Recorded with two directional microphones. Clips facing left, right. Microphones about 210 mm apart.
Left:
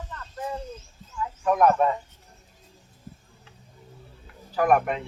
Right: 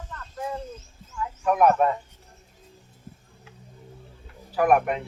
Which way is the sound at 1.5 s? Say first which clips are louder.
Right 1 dB; 10° right (ahead or behind).